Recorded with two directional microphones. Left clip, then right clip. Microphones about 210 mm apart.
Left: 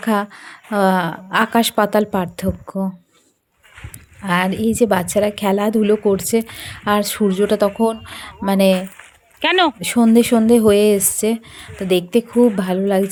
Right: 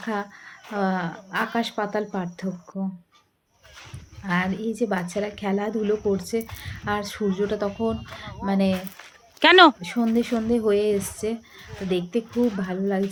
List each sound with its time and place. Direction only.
0.0 s a woman's voice: 50° left (ahead or behind)
4.2 s a woman's voice: 50° left (ahead or behind)
9.4 s speech: 15° right (ahead or behind)
9.8 s a woman's voice: 50° left (ahead or behind)